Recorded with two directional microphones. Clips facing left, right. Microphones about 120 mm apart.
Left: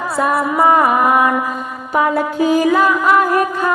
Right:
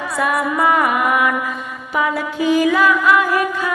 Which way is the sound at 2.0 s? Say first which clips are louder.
Left 4 dB; 45° left (ahead or behind).